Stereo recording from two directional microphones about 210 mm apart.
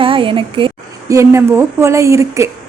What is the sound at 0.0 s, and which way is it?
A woman's voice, 25° right (ahead or behind).